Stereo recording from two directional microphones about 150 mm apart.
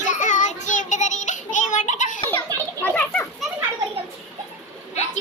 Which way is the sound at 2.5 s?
25° right (ahead or behind).